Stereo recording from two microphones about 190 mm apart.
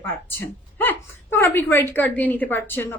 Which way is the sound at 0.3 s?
10° left (ahead or behind).